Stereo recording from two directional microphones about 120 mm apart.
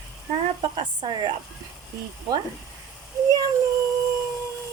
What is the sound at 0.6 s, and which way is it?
Speech, 40° right (ahead or behind).